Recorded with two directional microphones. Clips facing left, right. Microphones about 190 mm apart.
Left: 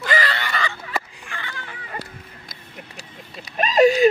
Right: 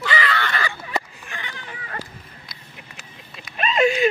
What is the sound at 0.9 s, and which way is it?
Fowl, 20° right (ahead or behind).